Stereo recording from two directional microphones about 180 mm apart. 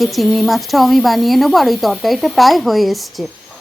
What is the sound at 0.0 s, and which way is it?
A woman's voice, centre (ahead or behind).